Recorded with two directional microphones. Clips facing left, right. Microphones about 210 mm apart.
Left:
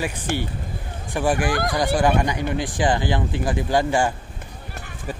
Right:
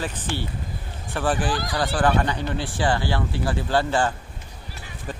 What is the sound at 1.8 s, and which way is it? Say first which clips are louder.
Speech: left 1 dB; 15° left (ahead or behind).